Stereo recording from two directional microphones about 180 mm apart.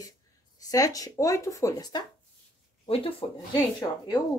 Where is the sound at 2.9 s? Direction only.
30° left (ahead or behind).